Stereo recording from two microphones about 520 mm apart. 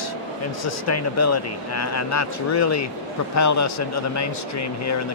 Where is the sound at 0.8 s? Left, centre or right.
Left.